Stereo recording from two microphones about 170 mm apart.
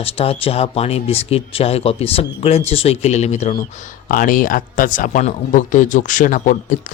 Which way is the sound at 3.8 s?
55° left (ahead or behind).